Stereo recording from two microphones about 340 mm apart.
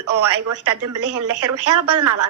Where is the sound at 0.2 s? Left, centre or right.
Right.